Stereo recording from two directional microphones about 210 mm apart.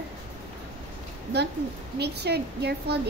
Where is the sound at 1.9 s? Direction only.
50° right (ahead or behind).